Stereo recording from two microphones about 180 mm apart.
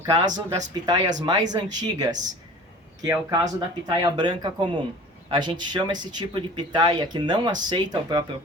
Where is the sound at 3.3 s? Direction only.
20° right (ahead or behind).